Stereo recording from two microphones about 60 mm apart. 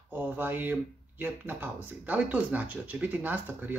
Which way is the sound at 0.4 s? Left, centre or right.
Right.